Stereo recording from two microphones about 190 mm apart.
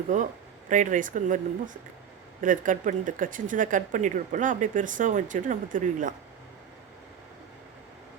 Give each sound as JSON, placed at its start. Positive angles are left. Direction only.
{"t": 0.1, "sound": "speech", "side_deg": -40}